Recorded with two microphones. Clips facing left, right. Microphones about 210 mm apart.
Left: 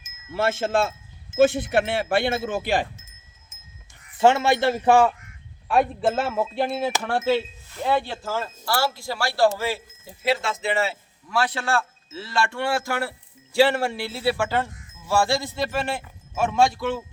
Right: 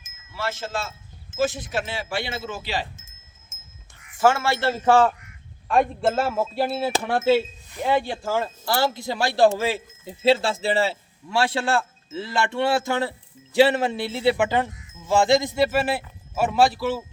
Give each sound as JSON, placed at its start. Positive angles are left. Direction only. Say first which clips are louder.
{"t": 0.3, "sound": "speech", "louder": "left 7 dB", "side_deg": 55}
{"t": 3.5, "sound": "wind chime", "louder": "right 3 dB", "side_deg": -45}
{"t": 4.2, "sound": "speech", "louder": "left 2 dB", "side_deg": 20}
{"t": 5.6, "sound": "a man's voice", "louder": "even", "side_deg": 0}
{"t": 10.4, "sound": "a man's voice", "louder": "right 2 dB", "side_deg": -30}